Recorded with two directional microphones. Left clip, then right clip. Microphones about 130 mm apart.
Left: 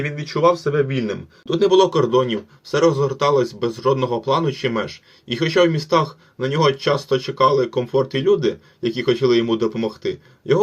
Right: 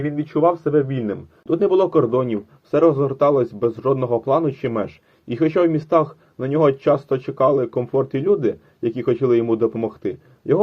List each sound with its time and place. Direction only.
0.0 s speech: 65° right (ahead or behind); by 2.8 s 45° right (ahead or behind)
2.8 s a man's voice: 60° right (ahead or behind)